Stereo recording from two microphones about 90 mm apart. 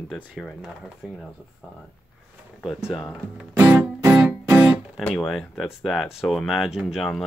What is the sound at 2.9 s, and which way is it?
Speech, 5° left (ahead or behind).